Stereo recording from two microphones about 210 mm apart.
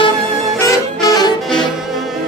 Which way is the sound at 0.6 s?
20° left (ahead or behind).